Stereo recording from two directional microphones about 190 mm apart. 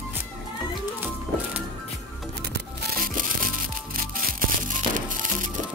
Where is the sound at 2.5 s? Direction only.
60° right (ahead or behind).